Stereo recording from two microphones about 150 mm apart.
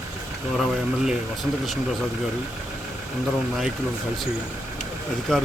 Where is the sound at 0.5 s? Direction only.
Centre (ahead or behind).